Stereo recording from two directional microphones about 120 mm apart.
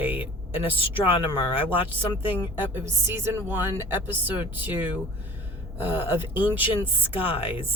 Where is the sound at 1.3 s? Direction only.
20° right (ahead or behind).